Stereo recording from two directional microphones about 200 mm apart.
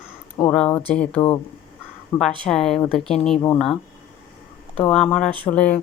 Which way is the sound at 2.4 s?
Centre (ahead or behind).